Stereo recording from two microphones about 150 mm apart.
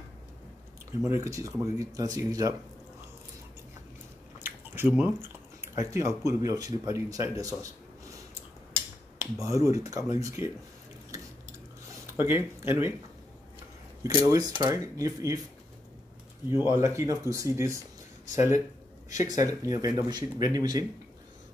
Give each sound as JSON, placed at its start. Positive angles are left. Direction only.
{"t": 1.0, "sound": "speech", "side_deg": -20}
{"t": 4.4, "sound": "chewing", "side_deg": -15}
{"t": 5.8, "sound": "speech", "side_deg": -20}
{"t": 9.2, "sound": "speech", "side_deg": -20}
{"t": 12.2, "sound": "speech", "side_deg": -15}
{"t": 14.0, "sound": "speech", "side_deg": -25}
{"t": 16.7, "sound": "speech", "side_deg": -20}
{"t": 19.0, "sound": "speech", "side_deg": -25}